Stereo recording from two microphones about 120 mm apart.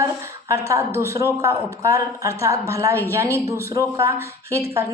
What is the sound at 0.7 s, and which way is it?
Mantra, 25° right (ahead or behind).